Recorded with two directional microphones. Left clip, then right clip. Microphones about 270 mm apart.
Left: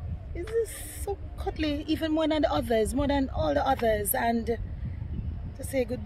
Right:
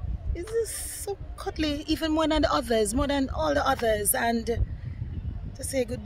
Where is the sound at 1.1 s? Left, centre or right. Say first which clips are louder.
Even; centre.